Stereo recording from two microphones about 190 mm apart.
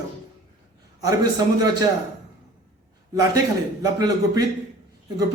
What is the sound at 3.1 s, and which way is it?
A man's voice, 20° right (ahead or behind).